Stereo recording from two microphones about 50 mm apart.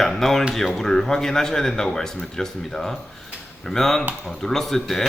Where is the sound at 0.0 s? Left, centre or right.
Centre.